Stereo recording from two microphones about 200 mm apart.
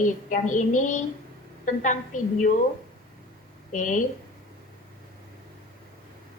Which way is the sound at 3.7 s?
40° left (ahead or behind).